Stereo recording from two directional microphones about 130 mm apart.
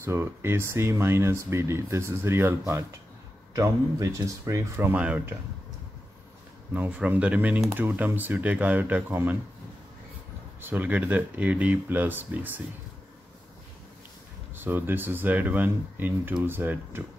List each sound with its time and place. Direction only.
0.0 s speech: 20° right (ahead or behind)
6.7 s speech: 10° right (ahead or behind)
10.6 s speech: 15° right (ahead or behind)
14.5 s speech: 15° right (ahead or behind)